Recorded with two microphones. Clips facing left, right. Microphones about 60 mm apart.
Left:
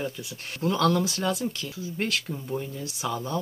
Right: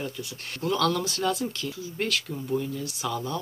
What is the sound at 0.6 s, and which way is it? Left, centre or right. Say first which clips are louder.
Speech: left 2 dB; left.